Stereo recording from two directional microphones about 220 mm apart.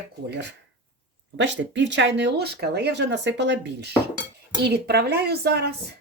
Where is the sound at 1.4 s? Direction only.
55° right (ahead or behind).